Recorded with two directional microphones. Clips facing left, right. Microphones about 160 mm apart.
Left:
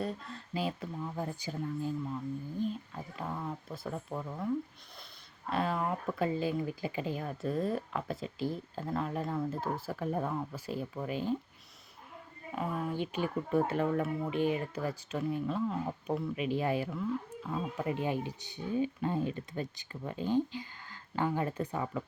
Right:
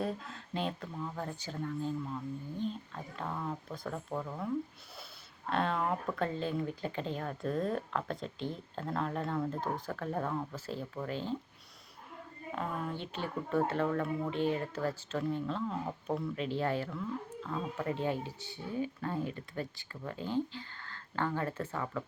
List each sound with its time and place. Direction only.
0.0 s speech: centre (ahead or behind)
5.5 s speech: 5° left (ahead or behind)
12.5 s speech: 10° left (ahead or behind)